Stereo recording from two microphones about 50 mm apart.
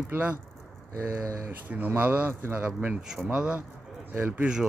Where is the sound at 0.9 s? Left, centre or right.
Right.